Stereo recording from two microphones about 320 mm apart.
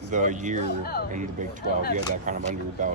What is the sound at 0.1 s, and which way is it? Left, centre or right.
Speech, right.